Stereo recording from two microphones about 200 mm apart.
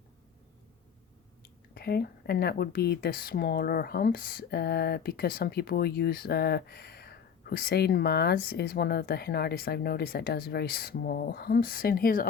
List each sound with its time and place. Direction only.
1.4 s speech: 50° left (ahead or behind)